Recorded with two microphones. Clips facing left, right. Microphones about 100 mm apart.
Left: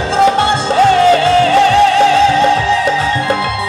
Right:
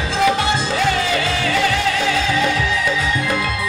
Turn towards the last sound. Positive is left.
turn(degrees=35)  # may be behind; listen again after turning